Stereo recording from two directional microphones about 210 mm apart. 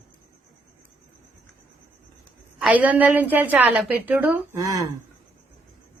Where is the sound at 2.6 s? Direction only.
5° right (ahead or behind).